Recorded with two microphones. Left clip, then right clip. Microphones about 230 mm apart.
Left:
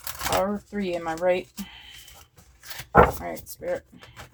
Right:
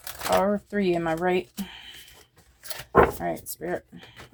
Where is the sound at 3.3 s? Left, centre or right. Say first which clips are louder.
Even; right.